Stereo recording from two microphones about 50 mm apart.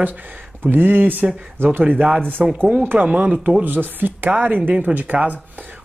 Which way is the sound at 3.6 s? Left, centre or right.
Right.